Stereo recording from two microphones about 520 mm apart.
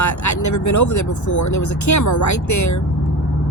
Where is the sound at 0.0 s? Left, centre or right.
Left.